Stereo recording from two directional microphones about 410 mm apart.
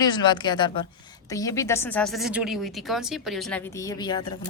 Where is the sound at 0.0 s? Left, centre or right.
Centre.